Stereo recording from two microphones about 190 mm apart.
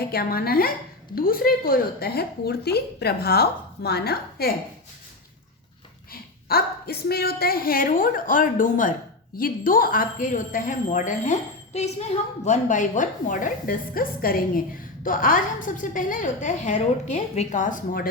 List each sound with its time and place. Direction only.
0.1 s a woman's voice: 50° left (ahead or behind)
6.5 s a woman's voice: 55° left (ahead or behind)